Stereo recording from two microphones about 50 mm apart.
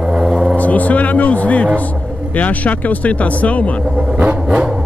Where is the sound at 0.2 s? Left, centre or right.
Centre.